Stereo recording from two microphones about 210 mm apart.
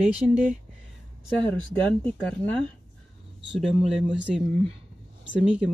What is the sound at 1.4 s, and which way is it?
Speech, 5° left (ahead or behind).